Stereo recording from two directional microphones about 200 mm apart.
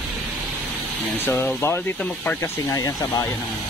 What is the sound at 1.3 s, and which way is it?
Speech, 10° left (ahead or behind).